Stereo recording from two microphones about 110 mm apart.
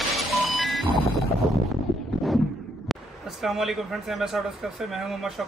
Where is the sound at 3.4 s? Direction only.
Centre (ahead or behind).